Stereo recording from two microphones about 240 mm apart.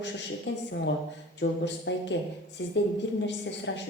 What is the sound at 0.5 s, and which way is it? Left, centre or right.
A woman's voice, left.